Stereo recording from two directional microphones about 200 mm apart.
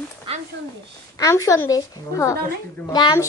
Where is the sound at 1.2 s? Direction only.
15° left (ahead or behind).